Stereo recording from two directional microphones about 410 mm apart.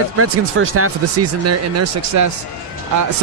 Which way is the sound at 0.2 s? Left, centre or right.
Right.